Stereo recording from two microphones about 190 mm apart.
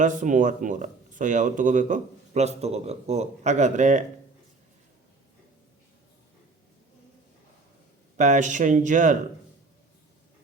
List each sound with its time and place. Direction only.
0.0 s speech: 40° right (ahead or behind)
8.1 s speech: 40° right (ahead or behind)